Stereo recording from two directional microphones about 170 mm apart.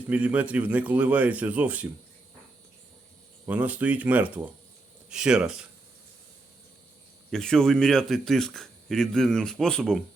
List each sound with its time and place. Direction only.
0.1 s speech: 10° right (ahead or behind)
3.4 s a man's voice: 10° right (ahead or behind)
7.3 s a man's voice: centre (ahead or behind)